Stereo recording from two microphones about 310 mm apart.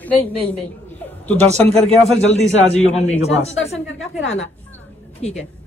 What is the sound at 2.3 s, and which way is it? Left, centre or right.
Speech, left.